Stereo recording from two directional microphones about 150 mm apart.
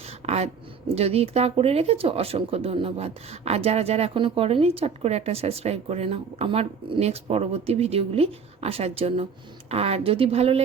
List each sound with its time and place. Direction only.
0.3 s speech: 45° right (ahead or behind)